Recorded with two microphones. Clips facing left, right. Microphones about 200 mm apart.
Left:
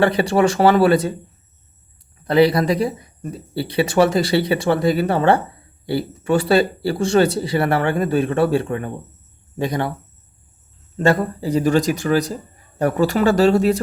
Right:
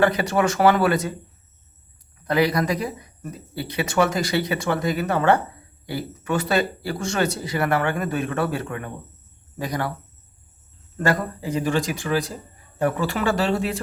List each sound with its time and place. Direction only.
0.0 s speech: 30° left (ahead or behind)
2.2 s speech: 30° left (ahead or behind)
10.9 s speech: 25° left (ahead or behind)